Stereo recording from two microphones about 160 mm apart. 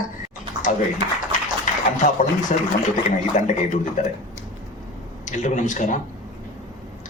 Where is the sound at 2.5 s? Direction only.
50° left (ahead or behind).